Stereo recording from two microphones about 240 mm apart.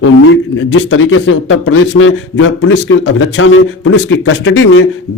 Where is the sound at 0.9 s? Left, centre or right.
Left.